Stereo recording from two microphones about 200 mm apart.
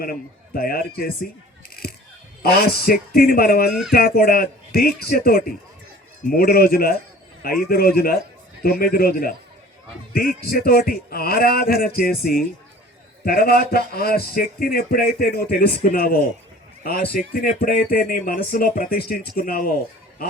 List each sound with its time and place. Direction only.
0.0 s a man's voice: 45° left (ahead or behind)
1.7 s a sound: 50° left (ahead or behind)
2.4 s a man's voice: 50° left (ahead or behind)
3.7 s speech: centre (ahead or behind)
3.9 s a man's voice: 50° left (ahead or behind)